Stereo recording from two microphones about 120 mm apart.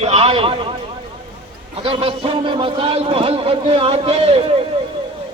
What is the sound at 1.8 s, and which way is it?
A man's voice, 55° right (ahead or behind).